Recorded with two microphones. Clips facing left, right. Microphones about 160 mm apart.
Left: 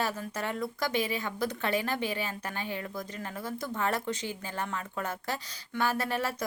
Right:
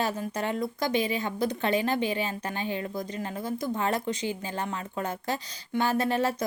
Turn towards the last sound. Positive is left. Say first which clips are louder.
# right 5 dB
turn(degrees=-20)  # may be behind; listen again after turning